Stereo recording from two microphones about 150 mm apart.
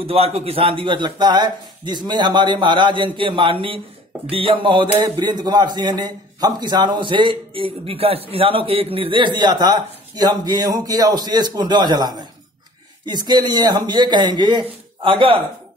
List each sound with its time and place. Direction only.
0.0 s a man's voice: 40° right (ahead or behind)